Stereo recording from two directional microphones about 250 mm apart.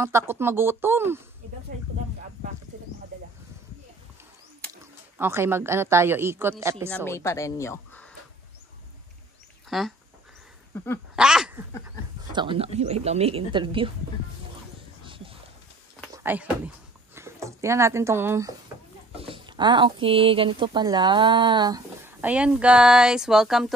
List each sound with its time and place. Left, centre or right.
0.0 s speech: centre
5.1 s speech: centre
7.1 s speech: centre
9.7 s speech: centre
11.1 s speech: centre
12.3 s speech: centre
15.0 s a sound: right
16.1 s speech: centre
18.7 s a sound: centre
19.1 s speech: right; by 23.7 s centre